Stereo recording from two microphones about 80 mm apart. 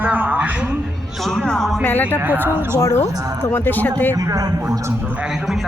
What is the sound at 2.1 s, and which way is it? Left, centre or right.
Speech, right.